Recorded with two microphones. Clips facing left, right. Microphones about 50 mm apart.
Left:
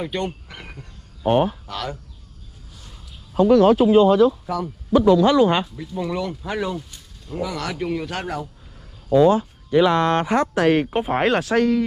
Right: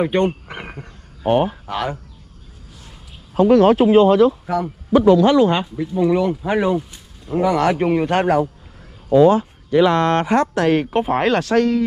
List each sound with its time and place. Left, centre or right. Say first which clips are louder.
0.0 s speech: right 8 dB; right
1.2 s speech: right 1 dB; right
1.7 s speech: right 6 dB; right
3.3 s speech: right 2 dB; right
5.6 s speech: right 7 dB; right
7.4 s a man's voice: right 10 dB; right
9.1 s speech: right 3 dB; right
10.5 s speech: right 1 dB; left
10.8 s speech: right 2 dB; centre